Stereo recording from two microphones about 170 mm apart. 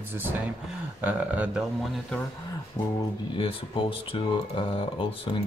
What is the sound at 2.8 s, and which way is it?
Speech, 20° left (ahead or behind).